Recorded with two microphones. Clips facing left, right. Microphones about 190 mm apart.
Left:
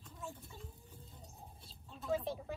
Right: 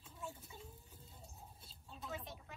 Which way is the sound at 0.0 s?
5° right (ahead or behind).